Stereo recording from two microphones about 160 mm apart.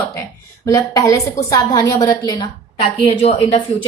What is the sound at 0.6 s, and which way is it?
Speech, 20° left (ahead or behind).